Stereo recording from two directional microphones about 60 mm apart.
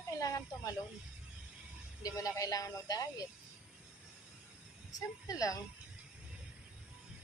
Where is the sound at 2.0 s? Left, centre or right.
Left.